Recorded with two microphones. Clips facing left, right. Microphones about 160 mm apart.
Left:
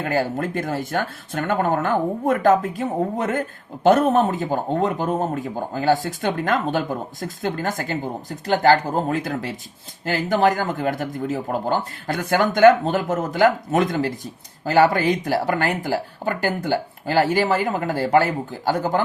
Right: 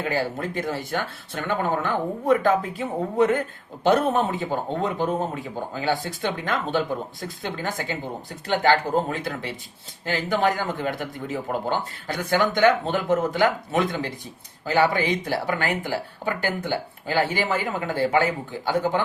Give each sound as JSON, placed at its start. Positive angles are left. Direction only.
{"t": 0.0, "sound": "speech", "side_deg": 45}